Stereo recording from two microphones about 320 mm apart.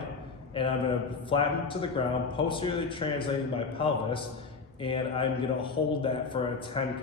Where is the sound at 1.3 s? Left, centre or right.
Centre.